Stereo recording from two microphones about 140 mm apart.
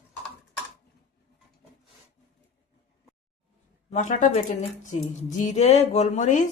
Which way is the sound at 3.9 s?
60° left (ahead or behind).